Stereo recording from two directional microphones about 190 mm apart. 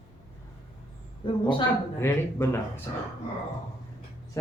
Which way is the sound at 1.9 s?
15° left (ahead or behind).